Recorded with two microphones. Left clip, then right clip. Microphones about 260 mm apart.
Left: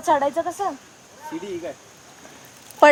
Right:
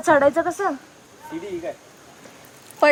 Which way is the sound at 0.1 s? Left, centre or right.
Right.